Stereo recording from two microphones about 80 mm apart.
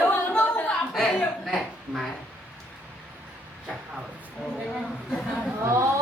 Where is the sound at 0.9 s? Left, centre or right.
Centre.